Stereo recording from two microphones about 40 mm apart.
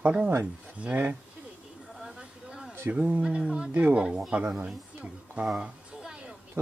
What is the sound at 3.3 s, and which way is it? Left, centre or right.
Speech, right.